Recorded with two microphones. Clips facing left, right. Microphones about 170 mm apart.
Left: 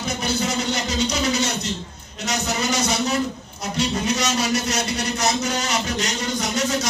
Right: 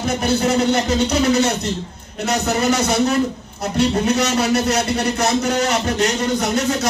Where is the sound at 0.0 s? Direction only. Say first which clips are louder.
Right 6 dB; 55° right (ahead or behind).